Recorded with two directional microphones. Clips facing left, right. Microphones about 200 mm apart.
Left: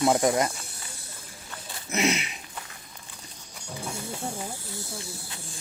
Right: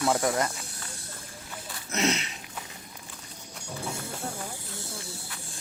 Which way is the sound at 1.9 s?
10° left (ahead or behind).